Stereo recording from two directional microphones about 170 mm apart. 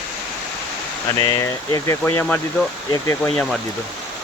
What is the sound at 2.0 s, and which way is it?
Speech, 5° left (ahead or behind).